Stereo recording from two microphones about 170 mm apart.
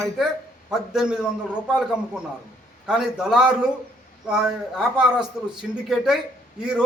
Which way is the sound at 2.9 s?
5° right (ahead or behind).